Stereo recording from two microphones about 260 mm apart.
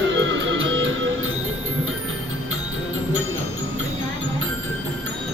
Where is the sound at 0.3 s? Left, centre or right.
Right.